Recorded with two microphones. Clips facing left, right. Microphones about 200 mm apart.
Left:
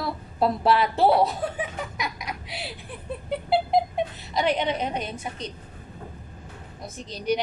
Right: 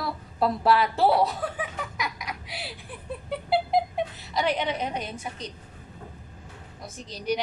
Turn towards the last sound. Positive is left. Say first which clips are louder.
# left 3 dB
turn(degrees=20)  # may be behind; listen again after turning